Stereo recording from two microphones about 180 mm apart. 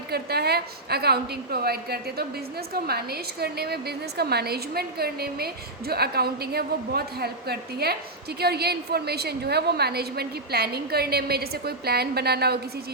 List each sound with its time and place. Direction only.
0.1 s a woman's voice: 60° right (ahead or behind)